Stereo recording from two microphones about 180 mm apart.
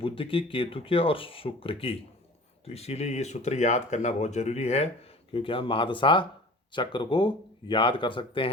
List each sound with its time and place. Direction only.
0.0 s speech: 30° left (ahead or behind)